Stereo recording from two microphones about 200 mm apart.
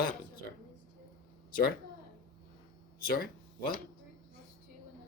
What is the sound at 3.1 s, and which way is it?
Speech, 45° left (ahead or behind).